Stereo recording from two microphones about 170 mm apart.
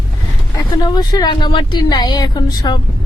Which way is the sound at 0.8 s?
25° left (ahead or behind).